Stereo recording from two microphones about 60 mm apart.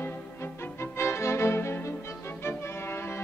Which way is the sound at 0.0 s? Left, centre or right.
Left.